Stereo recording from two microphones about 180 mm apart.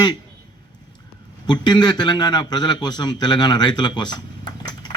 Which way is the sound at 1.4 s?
25° left (ahead or behind).